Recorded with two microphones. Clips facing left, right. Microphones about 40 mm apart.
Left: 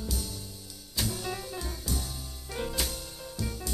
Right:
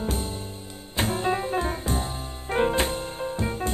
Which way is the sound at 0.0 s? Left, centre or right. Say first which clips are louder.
Right 8 dB; right.